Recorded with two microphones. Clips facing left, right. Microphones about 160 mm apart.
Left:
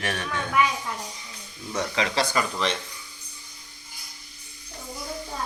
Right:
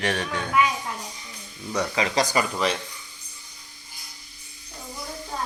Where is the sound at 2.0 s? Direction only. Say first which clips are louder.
Right 2 dB; 40° right (ahead or behind).